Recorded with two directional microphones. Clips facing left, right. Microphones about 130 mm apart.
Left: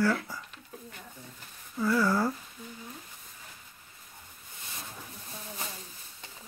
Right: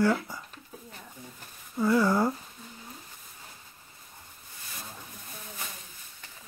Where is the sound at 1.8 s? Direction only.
25° right (ahead or behind).